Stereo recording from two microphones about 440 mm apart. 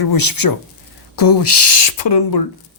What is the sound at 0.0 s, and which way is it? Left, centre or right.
Speech, left.